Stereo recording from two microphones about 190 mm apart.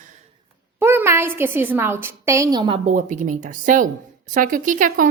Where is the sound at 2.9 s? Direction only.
40° right (ahead or behind).